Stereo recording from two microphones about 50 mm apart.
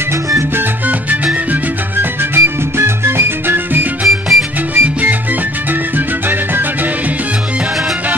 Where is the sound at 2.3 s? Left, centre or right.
Right.